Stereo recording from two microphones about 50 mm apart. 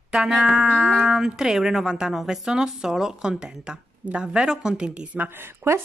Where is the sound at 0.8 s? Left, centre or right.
Centre.